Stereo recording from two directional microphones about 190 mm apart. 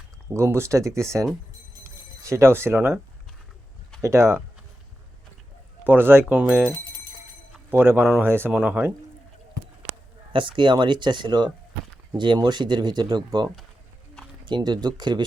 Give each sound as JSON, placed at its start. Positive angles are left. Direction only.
{"t": 0.3, "sound": "speech", "side_deg": -15}
{"t": 1.8, "sound": "a sound", "side_deg": -15}
{"t": 4.0, "sound": "speech", "side_deg": -15}
{"t": 5.8, "sound": "speech", "side_deg": -10}
{"t": 10.3, "sound": "speech", "side_deg": -25}